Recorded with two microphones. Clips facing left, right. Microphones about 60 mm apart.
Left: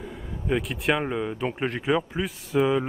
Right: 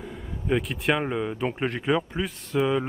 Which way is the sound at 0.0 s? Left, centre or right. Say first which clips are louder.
Even; centre.